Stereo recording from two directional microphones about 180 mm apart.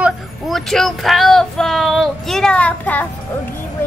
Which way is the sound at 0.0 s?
Centre (ahead or behind).